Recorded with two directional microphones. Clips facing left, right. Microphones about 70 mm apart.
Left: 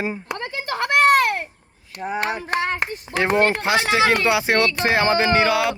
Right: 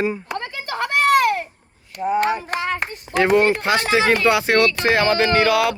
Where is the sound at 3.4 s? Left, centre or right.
Left.